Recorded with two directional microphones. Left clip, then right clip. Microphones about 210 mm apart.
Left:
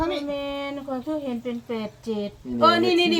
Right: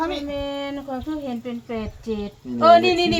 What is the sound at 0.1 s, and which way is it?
A woman's voice, 20° right (ahead or behind).